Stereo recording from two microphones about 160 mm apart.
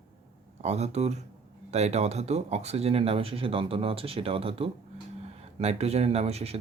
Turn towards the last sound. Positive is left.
turn(degrees=-40)  # may be behind; listen again after turning